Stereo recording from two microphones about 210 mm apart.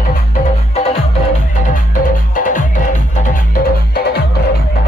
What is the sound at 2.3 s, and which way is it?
Music, 40° left (ahead or behind).